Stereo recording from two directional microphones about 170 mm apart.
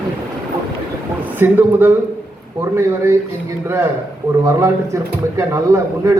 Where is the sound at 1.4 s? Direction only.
10° right (ahead or behind).